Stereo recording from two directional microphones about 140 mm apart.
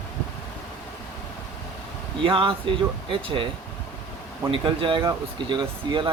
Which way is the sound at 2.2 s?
40° right (ahead or behind).